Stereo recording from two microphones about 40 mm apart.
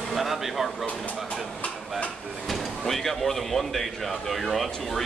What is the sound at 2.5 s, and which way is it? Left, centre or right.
A man's voice, centre.